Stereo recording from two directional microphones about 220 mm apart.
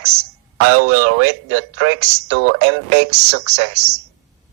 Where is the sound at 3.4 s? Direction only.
50° right (ahead or behind).